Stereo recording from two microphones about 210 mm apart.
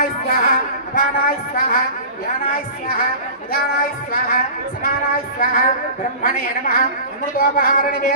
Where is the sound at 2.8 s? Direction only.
45° left (ahead or behind).